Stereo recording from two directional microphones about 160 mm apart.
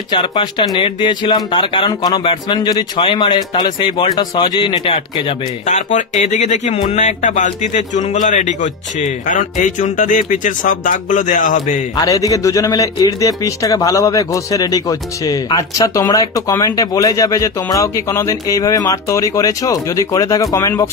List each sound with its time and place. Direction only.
0.1 s a man's voice: 30° left (ahead or behind)
5.7 s speech: 50° left (ahead or behind)
12.0 s a man's voice: 20° left (ahead or behind)